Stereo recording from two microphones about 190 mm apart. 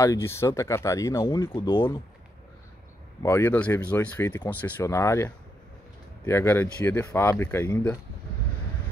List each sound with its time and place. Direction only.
0.0 s speech: 15° left (ahead or behind)
3.2 s speech: 15° left (ahead or behind)